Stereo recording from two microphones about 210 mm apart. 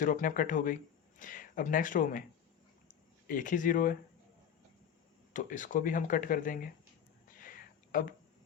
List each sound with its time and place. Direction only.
0.0 s speech: 40° left (ahead or behind)
3.2 s speech: 40° left (ahead or behind)
5.3 s speech: 40° left (ahead or behind)
7.4 s a sound: 40° left (ahead or behind)